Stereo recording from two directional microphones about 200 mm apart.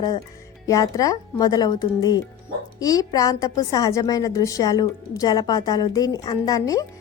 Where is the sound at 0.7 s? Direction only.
15° left (ahead or behind).